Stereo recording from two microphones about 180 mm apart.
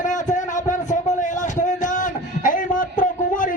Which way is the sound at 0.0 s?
45° left (ahead or behind).